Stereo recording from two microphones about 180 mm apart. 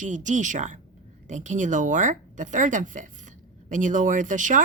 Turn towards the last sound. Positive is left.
turn(degrees=-45)  # may be behind; listen again after turning